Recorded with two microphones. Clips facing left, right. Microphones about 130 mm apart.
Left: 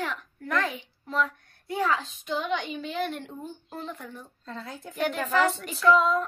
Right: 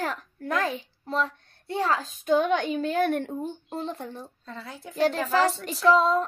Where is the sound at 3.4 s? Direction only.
30° right (ahead or behind).